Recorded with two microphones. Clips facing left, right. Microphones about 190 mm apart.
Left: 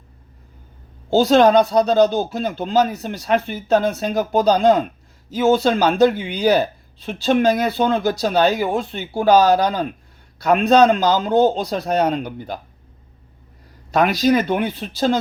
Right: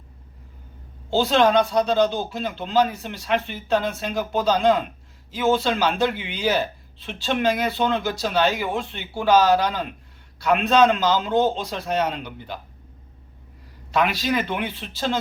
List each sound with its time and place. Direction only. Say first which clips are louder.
1.1 s speech: left 5 dB; 40° left (ahead or behind)
13.9 s speech: left 6 dB; 40° left (ahead or behind)